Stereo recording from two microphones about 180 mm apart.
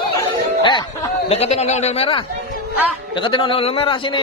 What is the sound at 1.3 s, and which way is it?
A man's voice, 35° left (ahead or behind).